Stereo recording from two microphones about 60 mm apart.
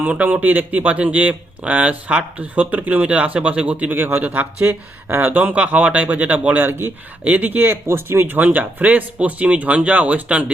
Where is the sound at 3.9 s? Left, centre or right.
Right.